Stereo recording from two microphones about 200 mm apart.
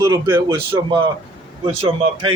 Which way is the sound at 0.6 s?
25° right (ahead or behind).